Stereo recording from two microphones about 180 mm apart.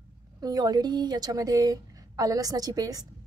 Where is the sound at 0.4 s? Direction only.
20° right (ahead or behind).